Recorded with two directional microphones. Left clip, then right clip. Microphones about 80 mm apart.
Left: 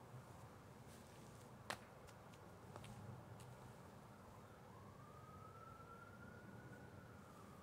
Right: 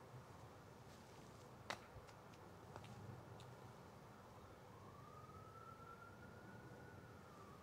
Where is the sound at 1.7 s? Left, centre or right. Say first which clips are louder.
Even; left.